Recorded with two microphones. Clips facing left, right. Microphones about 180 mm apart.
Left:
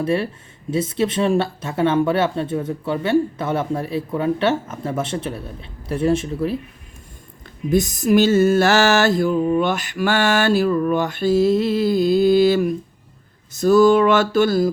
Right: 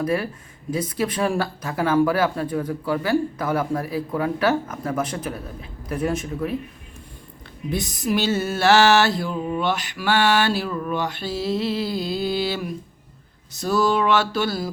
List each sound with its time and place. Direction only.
0.0 s speech: 25° left (ahead or behind)
7.7 s mantra: 45° left (ahead or behind)